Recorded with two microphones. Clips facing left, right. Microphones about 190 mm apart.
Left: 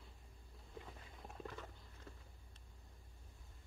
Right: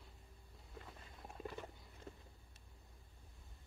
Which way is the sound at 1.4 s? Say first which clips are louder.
Right 3 dB; 15° right (ahead or behind).